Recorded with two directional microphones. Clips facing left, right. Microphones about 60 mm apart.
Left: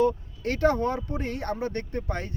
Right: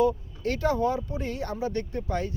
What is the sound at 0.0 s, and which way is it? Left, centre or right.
Speech, left.